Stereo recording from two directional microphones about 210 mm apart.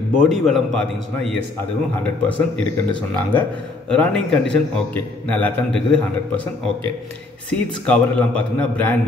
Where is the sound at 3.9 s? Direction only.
5° left (ahead or behind).